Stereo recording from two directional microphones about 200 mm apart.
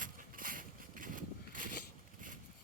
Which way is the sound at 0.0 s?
45° right (ahead or behind).